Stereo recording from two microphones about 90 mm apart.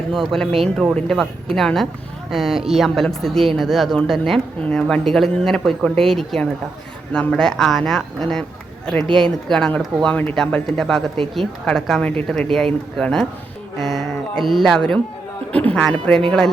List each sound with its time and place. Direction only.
0.1 s speech: 5° left (ahead or behind)
13.7 s a sound: centre (ahead or behind)
14.4 s speech: centre (ahead or behind)